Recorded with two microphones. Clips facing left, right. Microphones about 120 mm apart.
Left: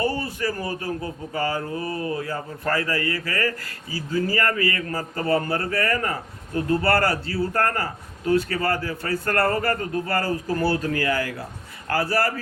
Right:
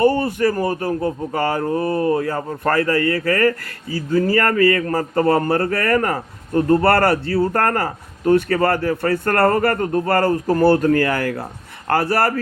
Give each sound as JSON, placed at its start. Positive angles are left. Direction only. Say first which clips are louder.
{"t": 0.2, "sound": "speech", "louder": "right 9 dB", "side_deg": -60}
{"t": 0.6, "sound": "speech", "louder": "right 8 dB", "side_deg": -40}
{"t": 1.4, "sound": "speech", "louder": "right 4 dB", "side_deg": -60}
{"t": 1.9, "sound": "speech", "louder": "right 9 dB", "side_deg": -40}
{"t": 2.2, "sound": "speech", "louder": "right 7 dB", "side_deg": -55}